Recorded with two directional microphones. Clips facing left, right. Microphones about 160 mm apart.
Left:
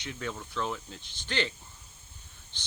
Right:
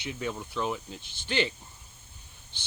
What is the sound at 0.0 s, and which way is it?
Speech, 15° right (ahead or behind).